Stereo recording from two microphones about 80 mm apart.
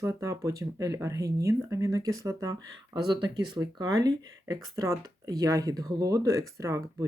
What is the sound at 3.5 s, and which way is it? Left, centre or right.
Speech, right.